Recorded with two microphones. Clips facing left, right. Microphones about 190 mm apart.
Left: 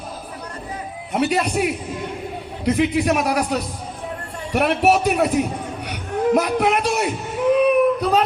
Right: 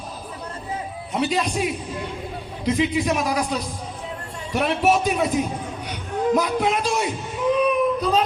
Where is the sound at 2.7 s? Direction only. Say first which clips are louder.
Left 3 dB; 65° left (ahead or behind).